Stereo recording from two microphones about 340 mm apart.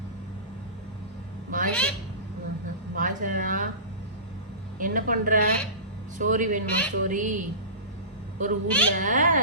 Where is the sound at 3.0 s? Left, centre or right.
Right.